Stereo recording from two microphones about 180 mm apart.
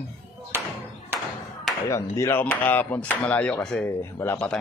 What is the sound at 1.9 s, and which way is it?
Speech, 15° left (ahead or behind).